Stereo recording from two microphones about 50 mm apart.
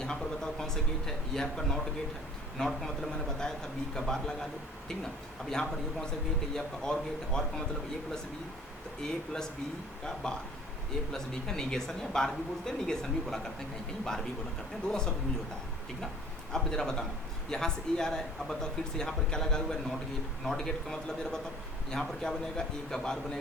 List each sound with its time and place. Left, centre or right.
0.0 s speech: centre
5.5 s speech: centre
9.0 s speech: centre
16.7 s speech: centre